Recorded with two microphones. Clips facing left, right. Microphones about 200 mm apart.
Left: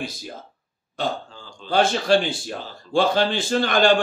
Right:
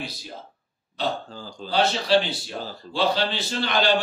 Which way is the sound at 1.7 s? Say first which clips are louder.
Left 3 dB; 50° left (ahead or behind).